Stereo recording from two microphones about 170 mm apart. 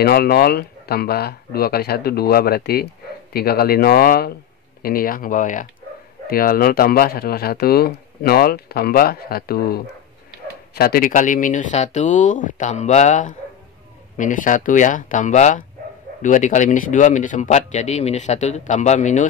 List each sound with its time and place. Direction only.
0.0 s speech: 65° left (ahead or behind); by 19.2 s 45° left (ahead or behind)